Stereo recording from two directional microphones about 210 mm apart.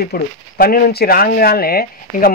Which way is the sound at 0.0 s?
45° left (ahead or behind).